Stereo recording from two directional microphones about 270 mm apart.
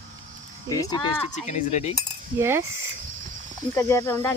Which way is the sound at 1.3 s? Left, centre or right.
Left.